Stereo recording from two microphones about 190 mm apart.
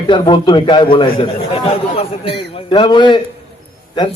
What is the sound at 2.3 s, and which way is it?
Speech, 25° left (ahead or behind).